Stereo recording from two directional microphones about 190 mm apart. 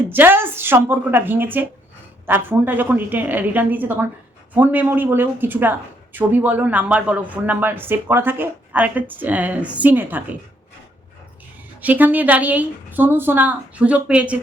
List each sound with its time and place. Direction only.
0.1 s speech: 10° right (ahead or behind)
11.8 s speech: 10° right (ahead or behind)